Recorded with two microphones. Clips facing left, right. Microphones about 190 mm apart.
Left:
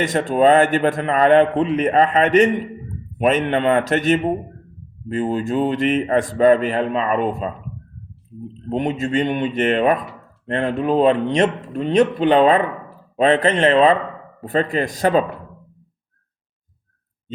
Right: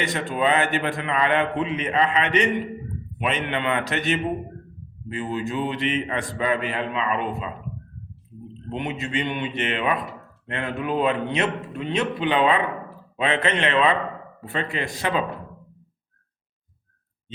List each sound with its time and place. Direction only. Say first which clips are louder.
0.0 s a man's voice: left 8 dB; 45° left (ahead or behind)
8.7 s a man's voice: left 8 dB; 40° left (ahead or behind)